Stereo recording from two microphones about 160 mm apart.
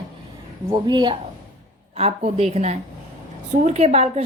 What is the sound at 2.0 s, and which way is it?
A woman's voice, 40° right (ahead or behind).